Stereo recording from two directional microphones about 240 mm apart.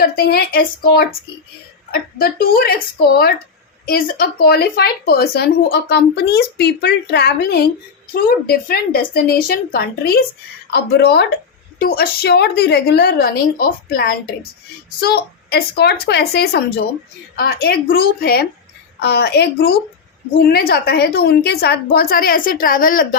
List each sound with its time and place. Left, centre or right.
0.0 s speech: left
3.8 s a woman's voice: left